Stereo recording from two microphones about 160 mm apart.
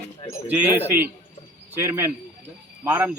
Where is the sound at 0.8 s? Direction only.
10° right (ahead or behind).